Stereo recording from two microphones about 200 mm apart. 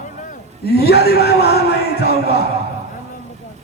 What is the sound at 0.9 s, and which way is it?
A man's voice, 55° left (ahead or behind).